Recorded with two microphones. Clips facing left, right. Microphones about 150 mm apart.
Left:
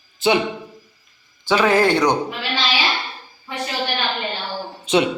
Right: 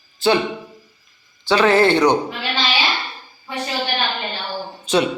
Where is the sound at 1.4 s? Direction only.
10° left (ahead or behind).